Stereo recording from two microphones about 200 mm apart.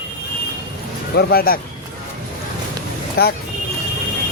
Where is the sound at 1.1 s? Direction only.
50° left (ahead or behind).